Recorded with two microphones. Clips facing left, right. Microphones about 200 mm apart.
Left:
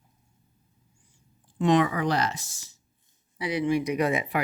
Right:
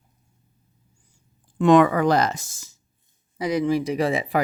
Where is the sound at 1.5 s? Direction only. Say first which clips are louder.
Right 7 dB; 50° right (ahead or behind).